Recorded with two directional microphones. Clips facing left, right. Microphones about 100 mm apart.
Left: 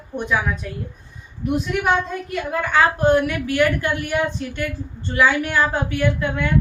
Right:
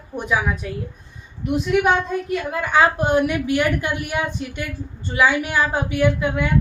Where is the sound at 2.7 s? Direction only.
15° right (ahead or behind).